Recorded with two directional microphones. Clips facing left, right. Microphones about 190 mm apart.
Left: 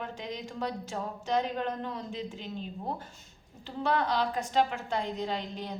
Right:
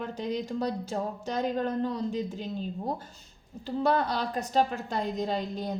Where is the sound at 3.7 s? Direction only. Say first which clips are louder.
Right 3 dB; 40° right (ahead or behind).